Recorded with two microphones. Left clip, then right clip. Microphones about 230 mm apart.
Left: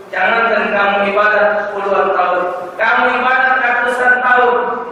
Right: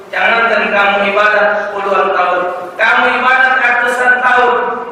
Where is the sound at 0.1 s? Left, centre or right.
Centre.